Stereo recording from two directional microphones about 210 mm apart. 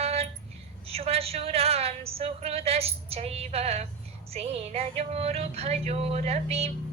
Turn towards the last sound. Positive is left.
turn(degrees=-30)  # may be behind; listen again after turning